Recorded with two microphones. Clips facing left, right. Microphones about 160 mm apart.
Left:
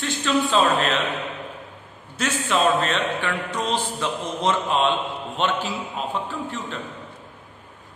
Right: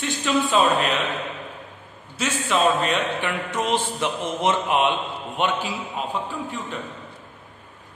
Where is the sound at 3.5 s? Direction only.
20° right (ahead or behind).